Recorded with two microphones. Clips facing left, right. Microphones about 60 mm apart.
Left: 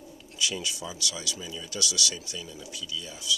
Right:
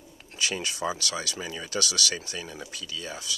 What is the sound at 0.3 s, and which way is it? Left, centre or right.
Speech, right.